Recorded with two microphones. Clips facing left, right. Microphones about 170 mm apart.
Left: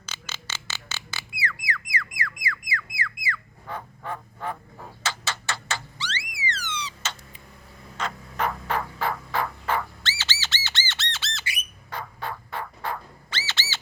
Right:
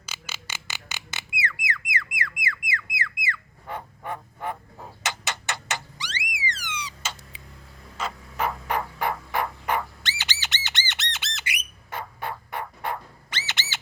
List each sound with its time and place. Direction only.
0.0 s squeak: 10° right (ahead or behind)
6.3 s a sound: 10° right (ahead or behind)
7.9 s turkey: 5° right (ahead or behind)